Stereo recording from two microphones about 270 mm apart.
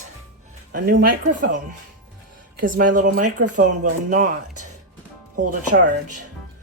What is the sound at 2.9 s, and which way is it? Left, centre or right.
Speech, right.